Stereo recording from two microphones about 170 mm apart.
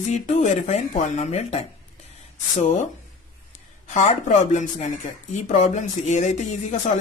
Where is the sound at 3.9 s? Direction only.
45° left (ahead or behind).